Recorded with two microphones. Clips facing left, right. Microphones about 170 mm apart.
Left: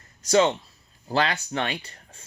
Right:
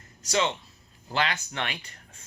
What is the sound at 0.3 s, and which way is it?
Speech, 40° left (ahead or behind).